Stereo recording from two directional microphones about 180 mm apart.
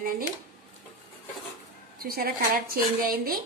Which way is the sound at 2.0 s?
55° right (ahead or behind).